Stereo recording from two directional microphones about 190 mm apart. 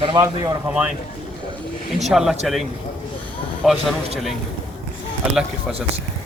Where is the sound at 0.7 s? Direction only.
5° right (ahead or behind).